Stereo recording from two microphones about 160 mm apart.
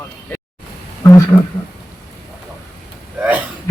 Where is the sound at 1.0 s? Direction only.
20° left (ahead or behind).